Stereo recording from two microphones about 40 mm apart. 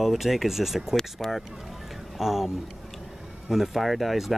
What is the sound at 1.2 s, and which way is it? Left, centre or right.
Speech, centre.